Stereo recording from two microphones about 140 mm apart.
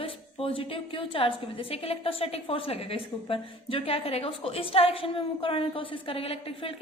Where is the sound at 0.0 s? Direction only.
40° left (ahead or behind).